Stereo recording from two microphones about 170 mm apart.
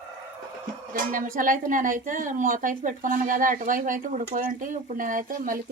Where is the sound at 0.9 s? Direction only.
55° right (ahead or behind).